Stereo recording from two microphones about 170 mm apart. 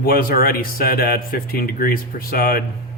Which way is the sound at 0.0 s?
60° left (ahead or behind).